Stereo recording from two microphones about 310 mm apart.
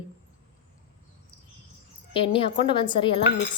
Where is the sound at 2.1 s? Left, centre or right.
Centre.